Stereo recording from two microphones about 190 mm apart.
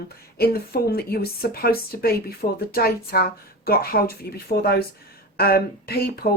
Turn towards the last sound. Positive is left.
turn(degrees=55)  # may be behind; listen again after turning